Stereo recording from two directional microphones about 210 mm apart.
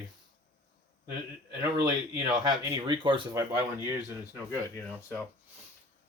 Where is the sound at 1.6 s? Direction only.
20° right (ahead or behind).